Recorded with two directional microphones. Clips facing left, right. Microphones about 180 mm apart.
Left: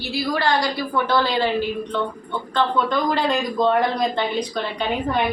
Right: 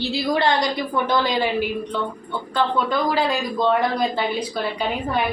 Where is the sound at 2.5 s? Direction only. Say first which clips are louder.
Even; 5° right (ahead or behind).